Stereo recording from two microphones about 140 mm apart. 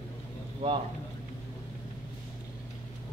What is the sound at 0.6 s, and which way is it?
Speech, 45° right (ahead or behind).